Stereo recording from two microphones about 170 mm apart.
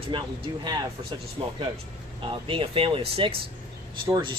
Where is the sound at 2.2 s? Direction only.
30° right (ahead or behind).